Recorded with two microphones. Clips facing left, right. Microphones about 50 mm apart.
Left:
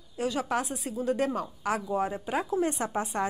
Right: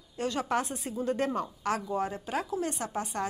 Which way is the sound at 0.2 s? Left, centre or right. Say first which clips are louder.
Left 1 dB; centre.